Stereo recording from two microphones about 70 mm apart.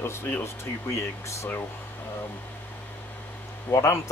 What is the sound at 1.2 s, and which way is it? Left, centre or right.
Speech, left.